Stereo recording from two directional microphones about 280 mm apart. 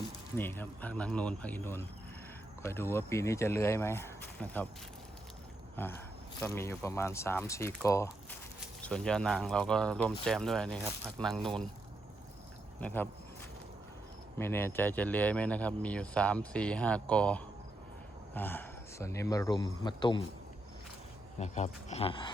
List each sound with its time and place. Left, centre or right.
0.3 s speech: centre
5.8 s speech: centre
12.8 s speech: centre
14.3 s speech: centre
21.3 s speech: left